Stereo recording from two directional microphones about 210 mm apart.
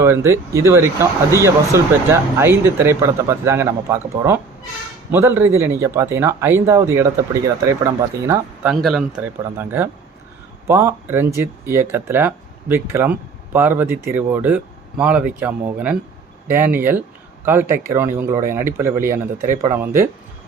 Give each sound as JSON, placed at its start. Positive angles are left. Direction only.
{"t": 0.0, "sound": "speech", "side_deg": -15}
{"t": 8.6, "sound": "speech", "side_deg": 0}